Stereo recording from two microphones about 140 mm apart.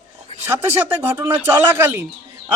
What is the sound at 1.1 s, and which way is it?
Speech, 15° right (ahead or behind).